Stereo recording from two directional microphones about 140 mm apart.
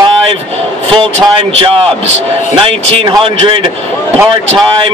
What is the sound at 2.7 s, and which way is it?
Speech, 40° right (ahead or behind).